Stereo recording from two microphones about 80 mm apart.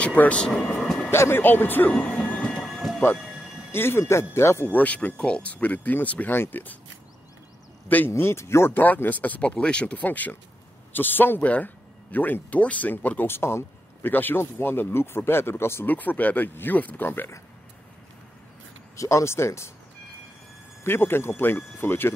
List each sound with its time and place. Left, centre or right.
0.0 s vehicle: centre
1.1 s speech: left
1.9 s train: centre
2.6 s thunder: centre
3.2 s music: centre
3.7 s speech: left
4.6 s speech: centre
8.1 s speech: left
18.9 s speech: left
20.8 s speech: left